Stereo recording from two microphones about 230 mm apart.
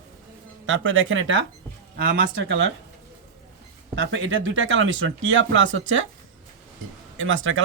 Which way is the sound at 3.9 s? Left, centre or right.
Right.